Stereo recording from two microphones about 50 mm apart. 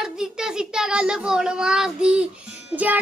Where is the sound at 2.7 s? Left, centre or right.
Right.